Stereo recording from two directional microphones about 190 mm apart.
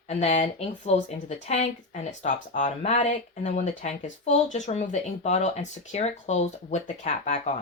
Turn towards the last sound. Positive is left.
turn(degrees=40)  # may be behind; listen again after turning